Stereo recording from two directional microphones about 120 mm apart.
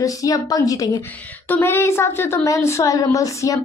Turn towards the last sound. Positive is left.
turn(degrees=30)  # may be behind; listen again after turning